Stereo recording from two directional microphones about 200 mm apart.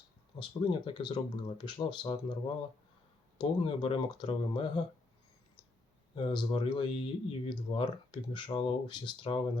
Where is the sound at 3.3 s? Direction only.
25° left (ahead or behind).